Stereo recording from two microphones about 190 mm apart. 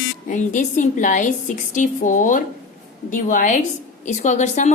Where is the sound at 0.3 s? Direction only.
40° left (ahead or behind).